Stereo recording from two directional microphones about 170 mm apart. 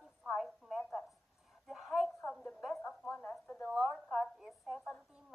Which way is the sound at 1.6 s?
Centre (ahead or behind).